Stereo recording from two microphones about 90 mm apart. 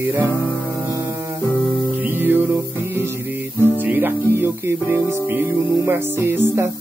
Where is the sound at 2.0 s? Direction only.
20° right (ahead or behind).